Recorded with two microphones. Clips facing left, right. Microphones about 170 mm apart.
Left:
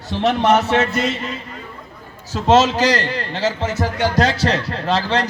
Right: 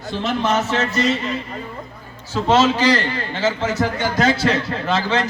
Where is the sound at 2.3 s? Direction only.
40° left (ahead or behind).